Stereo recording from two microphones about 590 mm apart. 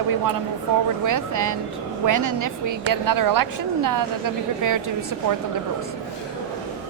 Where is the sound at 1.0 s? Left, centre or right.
Right.